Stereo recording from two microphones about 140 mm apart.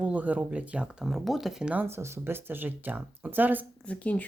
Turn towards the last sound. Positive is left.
turn(degrees=10)  # may be behind; listen again after turning